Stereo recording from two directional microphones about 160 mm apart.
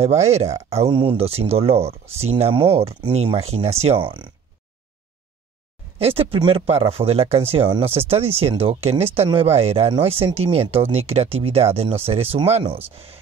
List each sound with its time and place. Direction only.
0.0 s speech: 40° right (ahead or behind)
5.9 s speech: 35° right (ahead or behind)